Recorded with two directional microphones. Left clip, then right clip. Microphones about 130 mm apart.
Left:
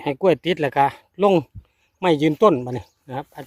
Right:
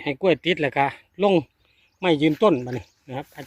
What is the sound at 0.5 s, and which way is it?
Speech, 30° left (ahead or behind).